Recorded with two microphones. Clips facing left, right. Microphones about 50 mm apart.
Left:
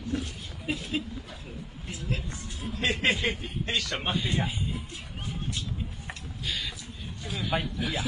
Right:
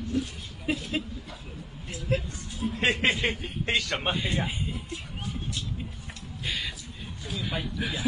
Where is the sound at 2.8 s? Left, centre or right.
Right.